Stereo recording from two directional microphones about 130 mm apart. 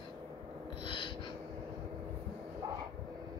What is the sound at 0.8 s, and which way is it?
Gasp, 40° left (ahead or behind).